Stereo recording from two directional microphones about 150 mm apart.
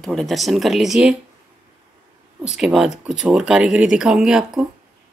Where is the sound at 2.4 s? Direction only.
5° right (ahead or behind).